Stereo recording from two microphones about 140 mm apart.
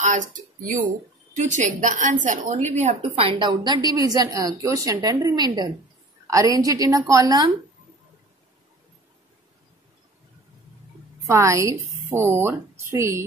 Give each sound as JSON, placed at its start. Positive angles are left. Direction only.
{"t": 0.0, "sound": "a woman's voice", "side_deg": -65}
{"t": 3.0, "sound": "a woman's voice", "side_deg": -40}
{"t": 11.2, "sound": "a woman's voice", "side_deg": -20}